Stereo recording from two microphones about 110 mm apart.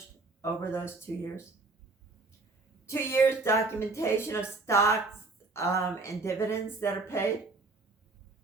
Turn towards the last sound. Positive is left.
turn(degrees=25)  # may be behind; listen again after turning